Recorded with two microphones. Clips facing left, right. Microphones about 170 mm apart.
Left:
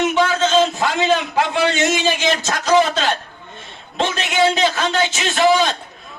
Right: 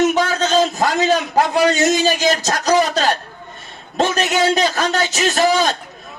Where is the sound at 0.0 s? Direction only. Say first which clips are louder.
Right 1 dB; 40° right (ahead or behind).